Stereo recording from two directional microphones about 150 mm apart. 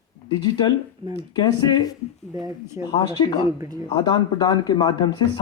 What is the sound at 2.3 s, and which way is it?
Speech, 25° right (ahead or behind).